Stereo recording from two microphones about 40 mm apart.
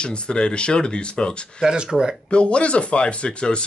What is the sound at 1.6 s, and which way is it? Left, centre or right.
Speech, centre.